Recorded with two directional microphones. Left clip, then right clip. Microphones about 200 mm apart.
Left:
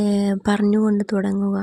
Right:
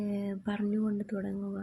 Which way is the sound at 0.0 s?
60° left (ahead or behind).